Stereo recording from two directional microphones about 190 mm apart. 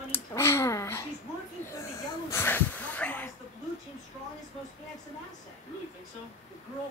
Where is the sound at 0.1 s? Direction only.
15° left (ahead or behind).